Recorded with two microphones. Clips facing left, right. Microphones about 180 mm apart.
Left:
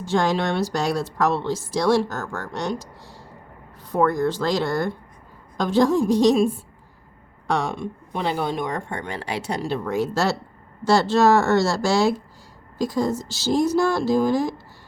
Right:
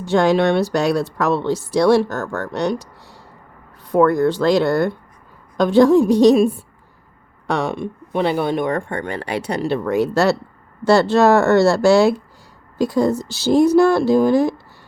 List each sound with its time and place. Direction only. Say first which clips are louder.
0.0 s speech: right 6 dB; 65° right (ahead or behind)